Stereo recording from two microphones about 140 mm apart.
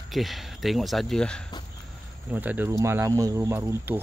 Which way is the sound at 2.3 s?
10° right (ahead or behind).